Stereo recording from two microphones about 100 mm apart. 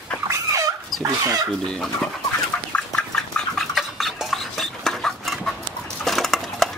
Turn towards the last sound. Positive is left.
turn(degrees=0)  # may be behind; listen again after turning